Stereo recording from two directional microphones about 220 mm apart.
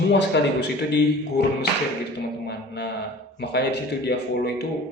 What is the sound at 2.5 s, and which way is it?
A man's voice, 50° left (ahead or behind).